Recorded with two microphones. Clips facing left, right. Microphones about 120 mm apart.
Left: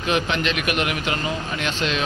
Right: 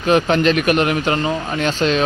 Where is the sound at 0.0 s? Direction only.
40° right (ahead or behind).